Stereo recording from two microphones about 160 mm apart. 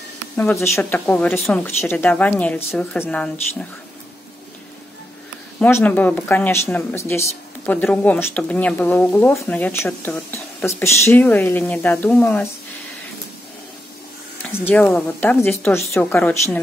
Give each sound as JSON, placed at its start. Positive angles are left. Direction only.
{"t": 0.4, "sound": "speech", "side_deg": 5}
{"t": 5.6, "sound": "speech", "side_deg": 10}
{"t": 14.6, "sound": "speech", "side_deg": 10}